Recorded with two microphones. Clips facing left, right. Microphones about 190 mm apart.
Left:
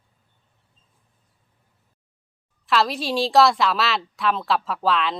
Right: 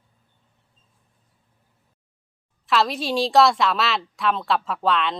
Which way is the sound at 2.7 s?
Centre (ahead or behind).